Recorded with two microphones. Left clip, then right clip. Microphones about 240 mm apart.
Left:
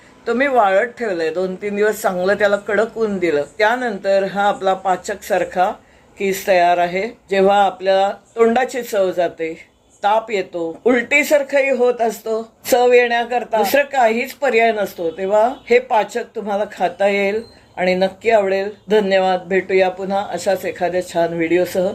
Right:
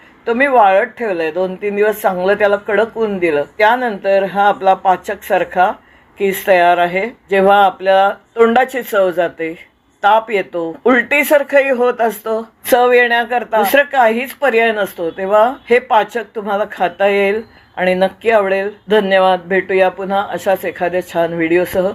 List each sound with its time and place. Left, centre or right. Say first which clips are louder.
0.3 s speech: right 4 dB; centre